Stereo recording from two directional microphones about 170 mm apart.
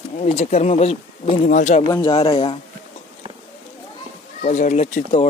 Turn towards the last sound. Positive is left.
turn(degrees=40)  # may be behind; listen again after turning